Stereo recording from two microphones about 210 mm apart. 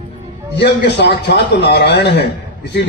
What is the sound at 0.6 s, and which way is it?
A man's voice, 55° left (ahead or behind).